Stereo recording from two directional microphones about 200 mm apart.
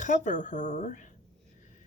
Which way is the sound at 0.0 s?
40° left (ahead or behind).